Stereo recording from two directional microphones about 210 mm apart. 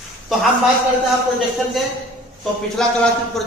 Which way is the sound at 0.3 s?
Centre (ahead or behind).